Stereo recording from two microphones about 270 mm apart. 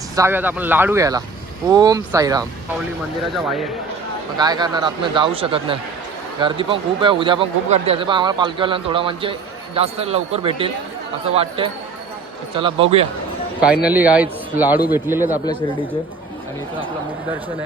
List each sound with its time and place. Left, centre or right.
0.2 s speech: centre
3.3 s a man's voice: centre
4.4 s speech: centre
13.8 s speech: centre